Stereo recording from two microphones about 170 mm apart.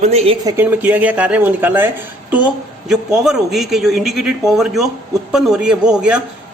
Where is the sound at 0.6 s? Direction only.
10° right (ahead or behind).